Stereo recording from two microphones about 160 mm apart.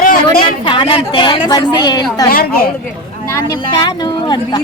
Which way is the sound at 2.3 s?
70° left (ahead or behind).